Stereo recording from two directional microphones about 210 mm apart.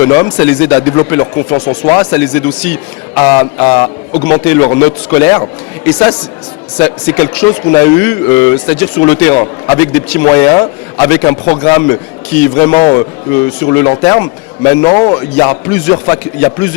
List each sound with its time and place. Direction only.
0.0 s speech: 10° left (ahead or behind)
14.8 s a man's voice: 25° left (ahead or behind)
15.1 s speech: 15° left (ahead or behind)